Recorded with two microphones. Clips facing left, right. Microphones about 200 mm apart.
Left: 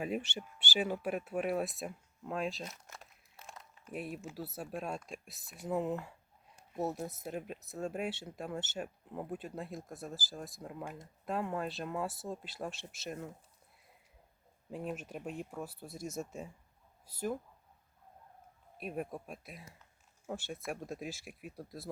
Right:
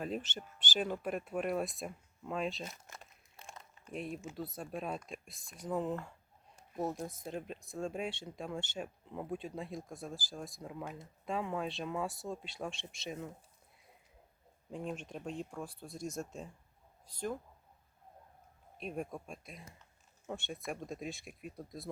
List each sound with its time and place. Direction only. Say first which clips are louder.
0.0 s speech: left 2 dB; 10° left (ahead or behind)
14.7 s speech: left 1 dB; 5° left (ahead or behind)
18.8 s speech: left 1 dB; 5° left (ahead or behind)